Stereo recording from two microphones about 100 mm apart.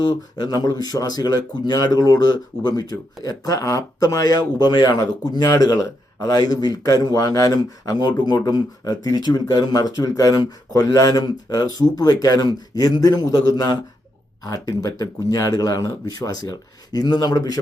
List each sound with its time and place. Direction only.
0.1 s speech: 40° left (ahead or behind)